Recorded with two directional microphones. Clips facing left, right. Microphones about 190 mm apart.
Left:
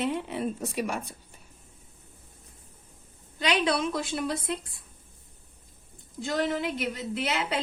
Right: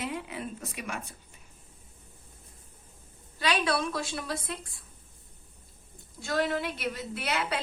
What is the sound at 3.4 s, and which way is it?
A woman's voice, 20° left (ahead or behind).